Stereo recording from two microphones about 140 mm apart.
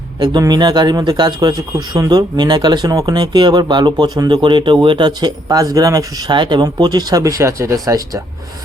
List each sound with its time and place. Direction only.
0.2 s speech: 30° right (ahead or behind)